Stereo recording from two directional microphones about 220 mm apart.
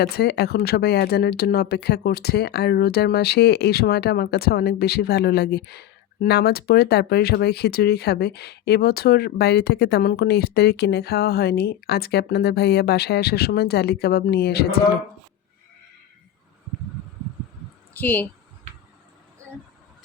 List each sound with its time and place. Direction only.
0.0 s speech: 45° left (ahead or behind)
18.0 s speech: 10° left (ahead or behind)